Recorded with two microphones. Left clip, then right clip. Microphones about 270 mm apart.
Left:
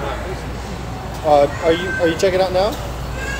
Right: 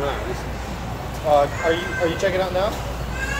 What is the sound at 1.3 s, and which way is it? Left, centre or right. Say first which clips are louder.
Speech: left 4 dB; left.